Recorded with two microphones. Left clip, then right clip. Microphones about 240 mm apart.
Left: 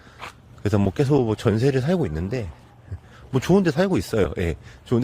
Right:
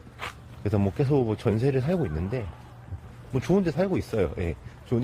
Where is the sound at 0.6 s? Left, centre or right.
Left.